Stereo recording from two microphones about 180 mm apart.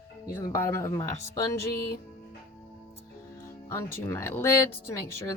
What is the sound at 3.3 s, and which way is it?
Speech, 15° left (ahead or behind).